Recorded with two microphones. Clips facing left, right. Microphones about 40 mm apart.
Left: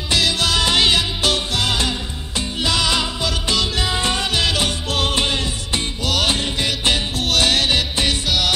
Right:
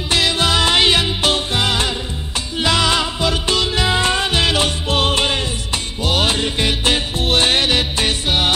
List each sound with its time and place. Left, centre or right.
0.1 s music: right
2.6 s music: right